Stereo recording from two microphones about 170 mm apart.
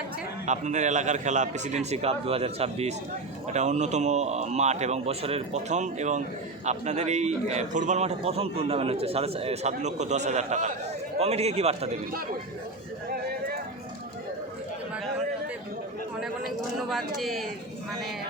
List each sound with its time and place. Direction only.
0.4 s a man's voice: 45° right (ahead or behind)
16.9 s speech: centre (ahead or behind)